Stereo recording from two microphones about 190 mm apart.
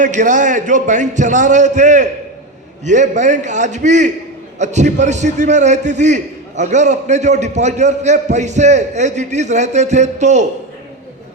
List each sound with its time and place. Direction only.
0.0 s a man's voice: 40° right (ahead or behind)